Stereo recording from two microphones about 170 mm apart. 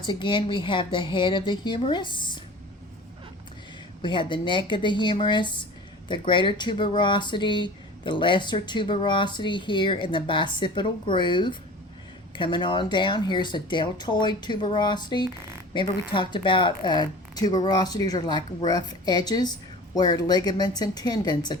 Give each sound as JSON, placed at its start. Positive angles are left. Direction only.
{"t": 0.0, "sound": "speech", "side_deg": 25}
{"t": 4.0, "sound": "speech", "side_deg": 30}